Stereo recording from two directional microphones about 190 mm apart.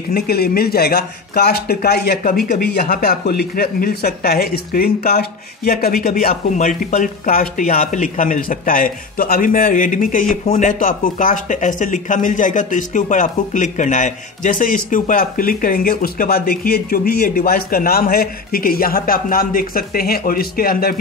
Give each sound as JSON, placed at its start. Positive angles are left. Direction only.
{"t": 0.1, "sound": "speech", "side_deg": 55}